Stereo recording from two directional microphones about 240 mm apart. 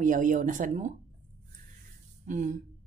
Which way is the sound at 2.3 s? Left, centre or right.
Right.